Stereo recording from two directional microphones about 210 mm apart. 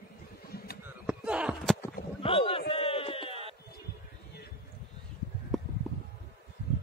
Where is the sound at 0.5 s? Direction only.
45° left (ahead or behind).